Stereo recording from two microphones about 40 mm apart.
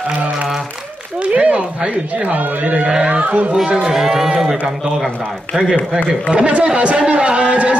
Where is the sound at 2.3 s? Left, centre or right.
Right.